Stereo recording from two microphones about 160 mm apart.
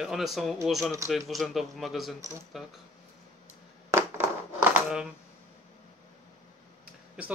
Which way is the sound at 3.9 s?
15° right (ahead or behind).